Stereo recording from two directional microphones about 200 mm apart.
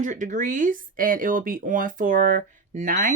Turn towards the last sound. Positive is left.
turn(degrees=-40)  # may be behind; listen again after turning